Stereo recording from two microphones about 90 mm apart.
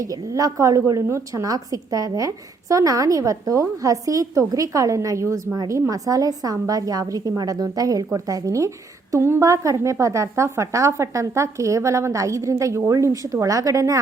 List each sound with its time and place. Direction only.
0.0 s a woman's voice: 40° right (ahead or behind)